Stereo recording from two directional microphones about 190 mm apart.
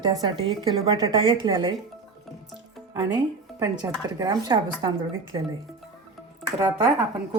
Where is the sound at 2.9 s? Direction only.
20° right (ahead or behind).